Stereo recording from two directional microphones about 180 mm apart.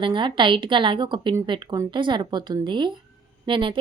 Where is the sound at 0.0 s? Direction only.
25° right (ahead or behind).